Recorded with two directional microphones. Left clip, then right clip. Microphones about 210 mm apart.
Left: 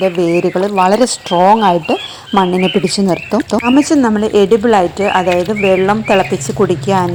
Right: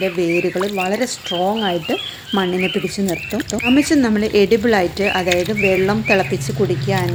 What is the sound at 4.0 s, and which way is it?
Speech, 5° right (ahead or behind).